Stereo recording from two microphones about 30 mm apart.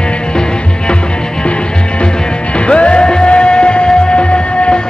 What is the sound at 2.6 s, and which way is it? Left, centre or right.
Music, left.